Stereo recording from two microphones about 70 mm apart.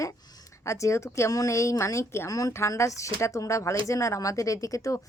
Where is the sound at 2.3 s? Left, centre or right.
Left.